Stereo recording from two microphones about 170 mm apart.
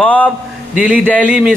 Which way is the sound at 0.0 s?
10° left (ahead or behind).